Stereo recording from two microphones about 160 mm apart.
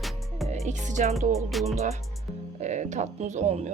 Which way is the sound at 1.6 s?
45° right (ahead or behind).